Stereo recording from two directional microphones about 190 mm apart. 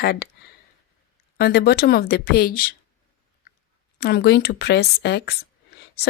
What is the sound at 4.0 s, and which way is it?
Speech, 60° left (ahead or behind).